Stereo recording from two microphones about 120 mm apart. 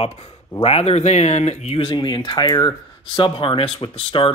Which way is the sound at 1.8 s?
40° left (ahead or behind).